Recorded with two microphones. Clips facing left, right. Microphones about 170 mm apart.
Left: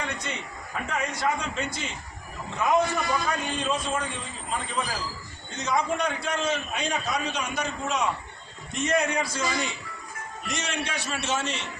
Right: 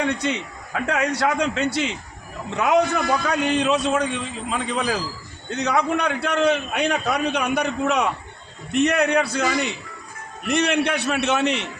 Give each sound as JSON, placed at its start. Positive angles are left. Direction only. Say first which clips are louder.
{"t": 0.0, "sound": "a man's voice", "louder": "right 10 dB", "side_deg": -70}